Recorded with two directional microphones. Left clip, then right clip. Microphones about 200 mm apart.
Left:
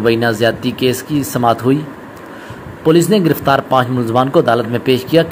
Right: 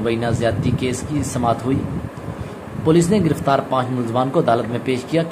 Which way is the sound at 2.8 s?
15° left (ahead or behind).